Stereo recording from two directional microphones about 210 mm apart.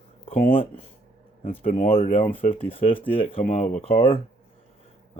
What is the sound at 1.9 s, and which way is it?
Speech, 25° left (ahead or behind).